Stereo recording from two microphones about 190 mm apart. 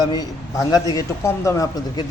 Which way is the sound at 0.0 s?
20° left (ahead or behind).